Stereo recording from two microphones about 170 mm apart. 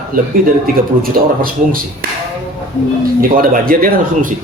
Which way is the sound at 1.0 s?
60° right (ahead or behind).